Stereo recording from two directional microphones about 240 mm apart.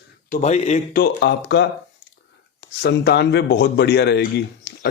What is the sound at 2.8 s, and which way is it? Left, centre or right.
Speech, left.